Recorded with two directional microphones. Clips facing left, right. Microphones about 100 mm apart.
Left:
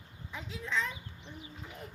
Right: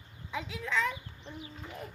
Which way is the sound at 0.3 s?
90° right.